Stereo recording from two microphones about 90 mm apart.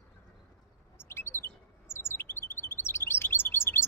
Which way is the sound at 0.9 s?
30° left (ahead or behind).